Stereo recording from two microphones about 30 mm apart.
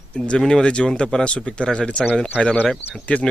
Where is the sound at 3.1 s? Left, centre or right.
Left.